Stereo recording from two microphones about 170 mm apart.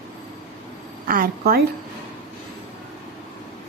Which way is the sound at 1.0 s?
60° right (ahead or behind).